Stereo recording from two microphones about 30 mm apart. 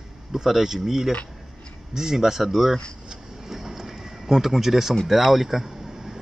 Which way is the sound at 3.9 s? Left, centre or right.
Centre.